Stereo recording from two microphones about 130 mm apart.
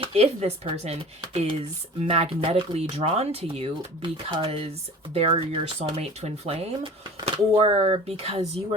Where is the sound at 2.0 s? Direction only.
50° right (ahead or behind).